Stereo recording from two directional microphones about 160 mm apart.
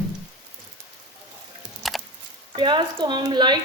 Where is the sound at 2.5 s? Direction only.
30° right (ahead or behind).